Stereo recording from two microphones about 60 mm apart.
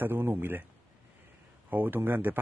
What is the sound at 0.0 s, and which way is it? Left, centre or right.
Speech, right.